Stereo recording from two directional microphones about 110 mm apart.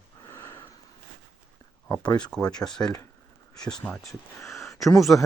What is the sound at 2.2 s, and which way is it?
Speech, 10° left (ahead or behind).